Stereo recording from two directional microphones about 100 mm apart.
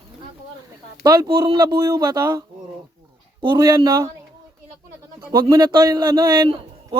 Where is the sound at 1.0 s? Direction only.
40° right (ahead or behind).